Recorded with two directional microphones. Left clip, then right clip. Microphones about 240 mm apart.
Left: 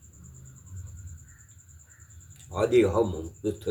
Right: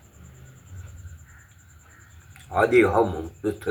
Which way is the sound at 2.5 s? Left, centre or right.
Left.